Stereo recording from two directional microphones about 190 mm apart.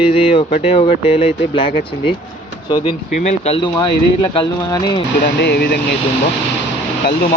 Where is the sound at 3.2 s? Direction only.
35° left (ahead or behind).